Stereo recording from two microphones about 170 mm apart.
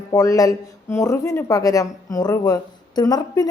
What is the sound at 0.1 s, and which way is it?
A man's voice, 20° left (ahead or behind).